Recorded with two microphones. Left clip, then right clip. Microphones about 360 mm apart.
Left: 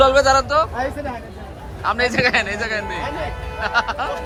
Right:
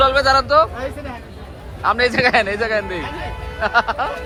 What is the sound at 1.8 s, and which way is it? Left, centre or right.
Speech, centre.